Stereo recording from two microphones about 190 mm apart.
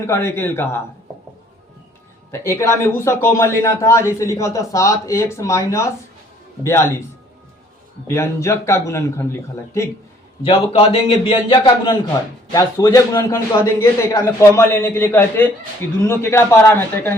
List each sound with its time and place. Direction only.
0.0 s a man's voice: 15° left (ahead or behind)
2.3 s a man's voice: 15° left (ahead or behind)
8.0 s a man's voice: 15° left (ahead or behind)
10.4 s a man's voice: 30° left (ahead or behind)
12.5 s a man's voice: 15° left (ahead or behind)